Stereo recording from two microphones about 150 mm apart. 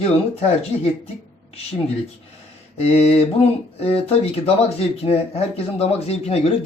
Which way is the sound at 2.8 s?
45° left (ahead or behind).